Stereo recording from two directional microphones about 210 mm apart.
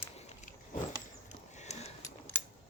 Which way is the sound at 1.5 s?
30° left (ahead or behind).